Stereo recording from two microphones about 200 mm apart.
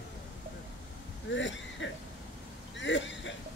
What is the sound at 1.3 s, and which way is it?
Throat clearing, 65° left (ahead or behind).